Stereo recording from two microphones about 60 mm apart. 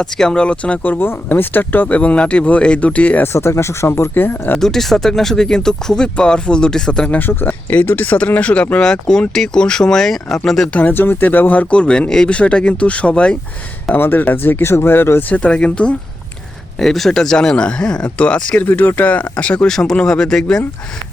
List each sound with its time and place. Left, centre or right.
0.0 s speech: centre
3.3 s speech: left
4.6 s speech: centre
7.1 s speech: left
8.8 s speech: centre
10.7 s speech: left
13.9 s speech: left
15.3 s speech: left
16.7 s speech: centre
18.6 s speech: left
19.6 s speech: centre